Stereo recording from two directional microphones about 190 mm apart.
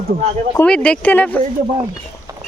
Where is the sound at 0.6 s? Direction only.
5° left (ahead or behind).